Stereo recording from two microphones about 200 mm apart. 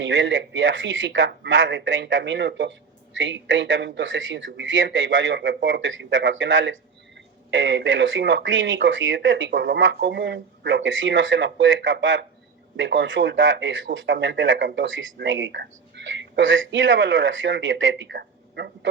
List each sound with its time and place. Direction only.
0.0 s speech: 65° right (ahead or behind)